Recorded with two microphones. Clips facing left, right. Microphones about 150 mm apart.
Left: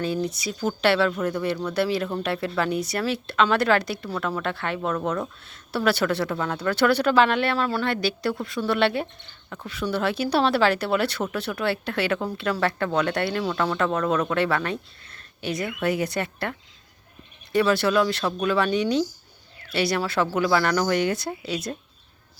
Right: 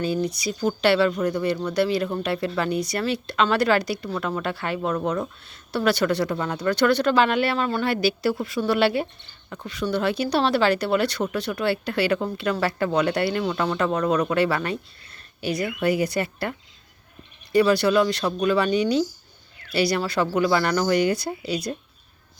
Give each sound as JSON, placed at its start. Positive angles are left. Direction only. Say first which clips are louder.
{"t": 0.0, "sound": "speech", "louder": "right 2 dB", "side_deg": 0}